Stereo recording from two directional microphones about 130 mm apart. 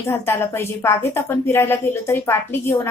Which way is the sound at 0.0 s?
20° left (ahead or behind).